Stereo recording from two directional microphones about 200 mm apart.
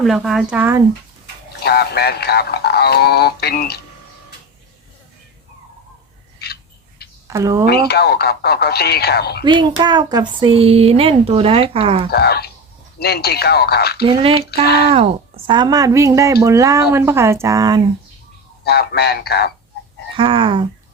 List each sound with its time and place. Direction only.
0.0 s speech: centre (ahead or behind)
1.6 s speech: 55° left (ahead or behind)
6.4 s bird: 55° left (ahead or behind)
7.3 s speech: 15° right (ahead or behind)
7.7 s speech: 55° left (ahead or behind)
9.4 s speech: 25° right (ahead or behind)
12.1 s speech: 50° left (ahead or behind)
14.0 s a woman's voice: 25° right (ahead or behind)
18.6 s speech: 55° left (ahead or behind)
20.1 s speech: 25° right (ahead or behind)